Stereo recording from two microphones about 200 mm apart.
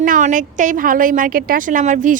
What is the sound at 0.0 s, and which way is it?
A woman's voice, 40° right (ahead or behind).